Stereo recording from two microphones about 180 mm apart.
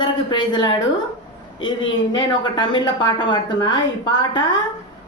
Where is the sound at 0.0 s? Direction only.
25° left (ahead or behind).